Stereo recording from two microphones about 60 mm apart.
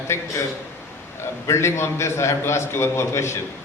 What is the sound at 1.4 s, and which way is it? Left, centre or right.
A man's voice, left.